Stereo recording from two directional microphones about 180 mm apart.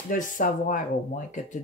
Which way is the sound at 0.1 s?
45° left (ahead or behind).